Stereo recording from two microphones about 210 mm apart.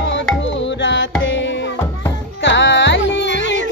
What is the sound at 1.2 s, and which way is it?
Music, 60° left (ahead or behind).